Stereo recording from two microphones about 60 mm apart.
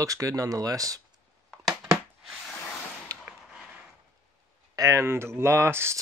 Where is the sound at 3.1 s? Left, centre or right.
Right.